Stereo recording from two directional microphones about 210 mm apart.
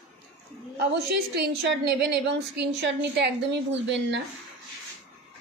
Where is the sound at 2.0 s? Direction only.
55° right (ahead or behind).